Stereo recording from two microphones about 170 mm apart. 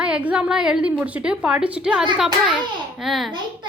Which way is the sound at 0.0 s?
5° right (ahead or behind).